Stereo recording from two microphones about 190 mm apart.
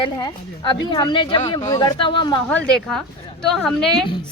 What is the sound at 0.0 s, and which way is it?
A woman's voice, 25° left (ahead or behind).